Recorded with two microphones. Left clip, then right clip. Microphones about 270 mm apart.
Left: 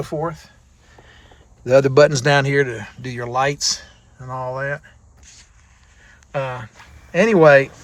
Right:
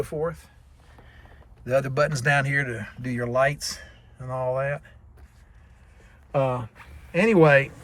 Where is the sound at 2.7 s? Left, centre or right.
Centre.